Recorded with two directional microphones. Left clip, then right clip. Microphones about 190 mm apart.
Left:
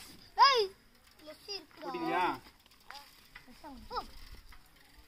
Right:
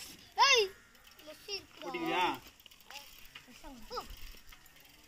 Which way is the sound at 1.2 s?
5° left (ahead or behind).